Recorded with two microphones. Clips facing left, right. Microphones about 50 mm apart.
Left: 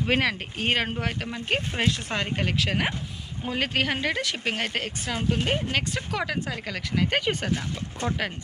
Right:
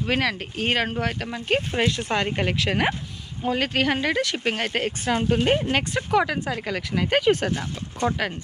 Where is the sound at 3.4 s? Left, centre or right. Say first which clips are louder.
Right 3 dB; centre.